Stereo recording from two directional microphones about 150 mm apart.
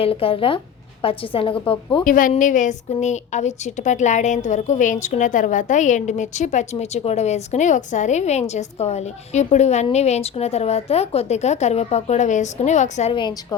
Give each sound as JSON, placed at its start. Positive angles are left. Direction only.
{"t": 0.0, "sound": "a woman's voice", "side_deg": 40}
{"t": 2.0, "sound": "a sound", "side_deg": 65}
{"t": 2.9, "sound": "a woman's voice", "side_deg": 50}
{"t": 13.1, "sound": "a woman's voice", "side_deg": 30}